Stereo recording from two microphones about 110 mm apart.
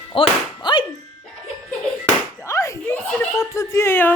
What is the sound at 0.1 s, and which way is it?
Music, 50° left (ahead or behind).